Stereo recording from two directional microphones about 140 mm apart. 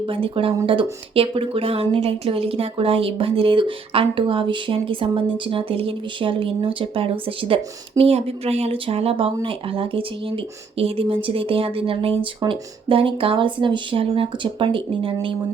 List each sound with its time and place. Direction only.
0.0 s a woman's voice: 40° right (ahead or behind)